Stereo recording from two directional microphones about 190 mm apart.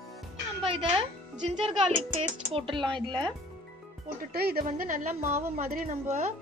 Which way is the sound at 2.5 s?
25° right (ahead or behind).